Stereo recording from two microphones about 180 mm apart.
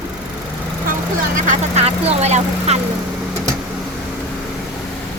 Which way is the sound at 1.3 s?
40° right (ahead or behind).